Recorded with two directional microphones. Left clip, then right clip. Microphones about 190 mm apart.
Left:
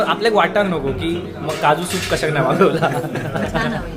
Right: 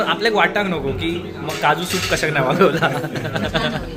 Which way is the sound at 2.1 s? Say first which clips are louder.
Left 1 dB; centre (ahead or behind).